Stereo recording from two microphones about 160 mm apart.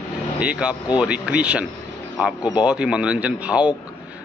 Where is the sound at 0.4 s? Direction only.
5° right (ahead or behind).